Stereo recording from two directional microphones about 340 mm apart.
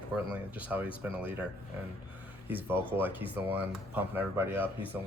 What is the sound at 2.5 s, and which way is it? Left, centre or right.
Speech, centre.